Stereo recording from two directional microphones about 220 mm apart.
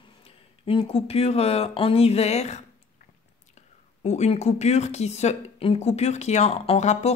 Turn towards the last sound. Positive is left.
turn(degrees=30)  # may be behind; listen again after turning